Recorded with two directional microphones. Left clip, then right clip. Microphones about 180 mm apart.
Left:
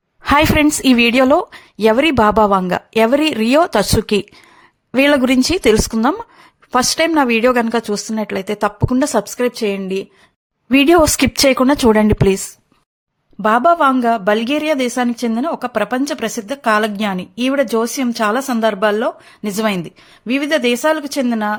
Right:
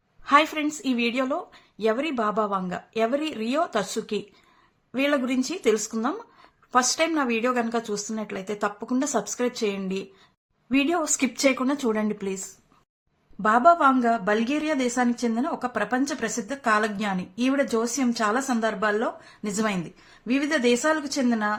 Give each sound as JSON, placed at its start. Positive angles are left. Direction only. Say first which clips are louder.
{"t": 0.2, "sound": "a woman's voice", "louder": "left 8 dB", "side_deg": 65}
{"t": 10.7, "sound": "a woman's voice", "louder": "left 13 dB", "side_deg": 65}
{"t": 13.4, "sound": "a woman's voice", "louder": "left 6 dB", "side_deg": 55}